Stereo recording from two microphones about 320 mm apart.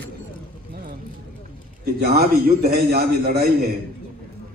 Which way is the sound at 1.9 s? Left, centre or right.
Right.